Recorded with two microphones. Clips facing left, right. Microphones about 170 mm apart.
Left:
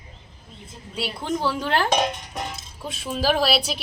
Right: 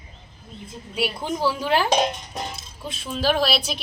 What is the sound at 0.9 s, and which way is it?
Speech, 10° right (ahead or behind).